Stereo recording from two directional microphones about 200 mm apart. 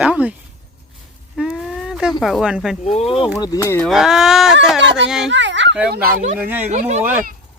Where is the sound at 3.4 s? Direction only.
15° left (ahead or behind).